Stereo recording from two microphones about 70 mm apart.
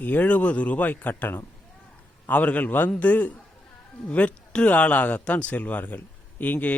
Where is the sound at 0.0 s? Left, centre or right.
Left.